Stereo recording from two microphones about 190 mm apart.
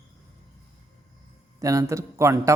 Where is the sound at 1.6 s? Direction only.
15° right (ahead or behind).